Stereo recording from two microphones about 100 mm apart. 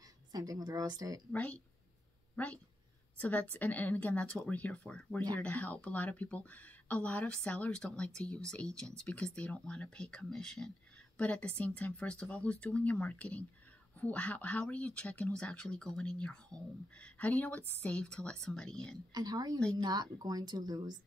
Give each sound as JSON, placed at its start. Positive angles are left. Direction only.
{"t": 0.0, "sound": "a woman's voice", "side_deg": -35}
{"t": 1.3, "sound": "speech", "side_deg": 15}
{"t": 19.1, "sound": "a woman's voice", "side_deg": -40}